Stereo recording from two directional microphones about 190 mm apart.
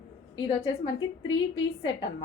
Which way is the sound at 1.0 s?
90° left.